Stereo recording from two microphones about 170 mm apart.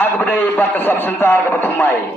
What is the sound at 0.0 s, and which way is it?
A man's voice, 10° left (ahead or behind).